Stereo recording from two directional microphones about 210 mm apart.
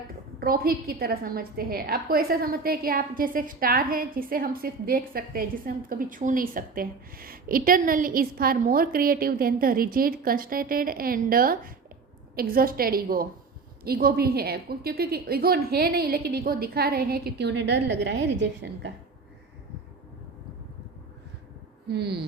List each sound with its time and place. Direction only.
0.3 s a woman's voice: 45° right (ahead or behind)
21.8 s a woman's voice: 50° right (ahead or behind)